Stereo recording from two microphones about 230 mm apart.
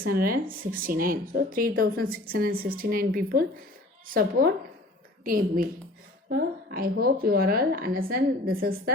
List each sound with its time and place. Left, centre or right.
0.0 s a woman's voice: right